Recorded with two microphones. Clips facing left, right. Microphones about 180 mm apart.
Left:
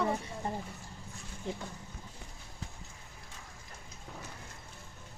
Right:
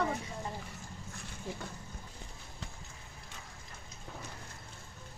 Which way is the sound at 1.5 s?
20° left (ahead or behind).